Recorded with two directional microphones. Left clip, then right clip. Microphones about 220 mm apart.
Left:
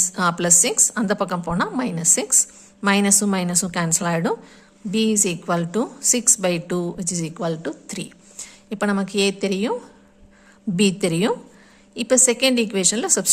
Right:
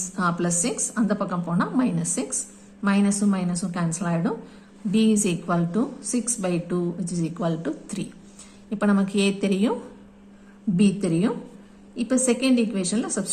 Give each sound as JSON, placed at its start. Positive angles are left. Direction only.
{"t": 0.2, "sound": "a woman's voice", "side_deg": 40}
{"t": 4.9, "sound": "a woman's voice", "side_deg": 30}
{"t": 10.8, "sound": "a woman's voice", "side_deg": 40}